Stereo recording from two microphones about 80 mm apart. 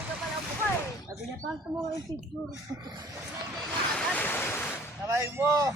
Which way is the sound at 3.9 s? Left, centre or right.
Centre.